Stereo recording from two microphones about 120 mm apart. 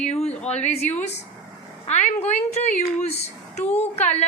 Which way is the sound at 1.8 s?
70° left (ahead or behind).